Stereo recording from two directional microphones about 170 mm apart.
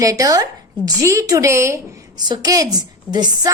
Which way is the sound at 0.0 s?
20° right (ahead or behind).